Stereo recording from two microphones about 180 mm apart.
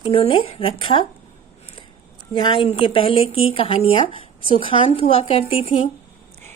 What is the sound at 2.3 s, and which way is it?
A woman's voice, 25° left (ahead or behind).